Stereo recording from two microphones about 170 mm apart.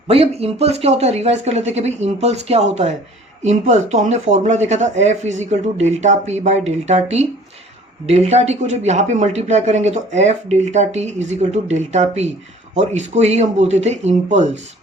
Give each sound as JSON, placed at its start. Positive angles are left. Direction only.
{"t": 0.1, "sound": "speech", "side_deg": -35}